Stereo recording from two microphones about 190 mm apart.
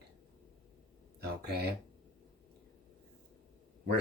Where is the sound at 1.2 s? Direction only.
60° right (ahead or behind).